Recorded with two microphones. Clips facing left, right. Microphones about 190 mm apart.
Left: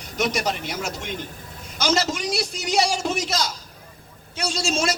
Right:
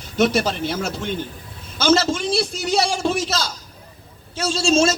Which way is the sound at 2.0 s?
15° left (ahead or behind).